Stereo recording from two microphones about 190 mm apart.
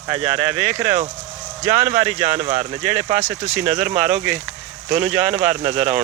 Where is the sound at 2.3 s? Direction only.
40° right (ahead or behind).